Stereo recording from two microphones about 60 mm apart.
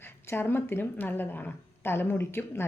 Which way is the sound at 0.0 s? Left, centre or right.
Left.